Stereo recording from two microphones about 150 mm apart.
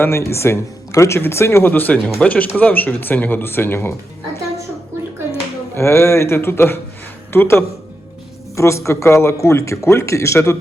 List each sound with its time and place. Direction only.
0.0 s speech: 15° left (ahead or behind)
5.3 s speech: 15° left (ahead or behind)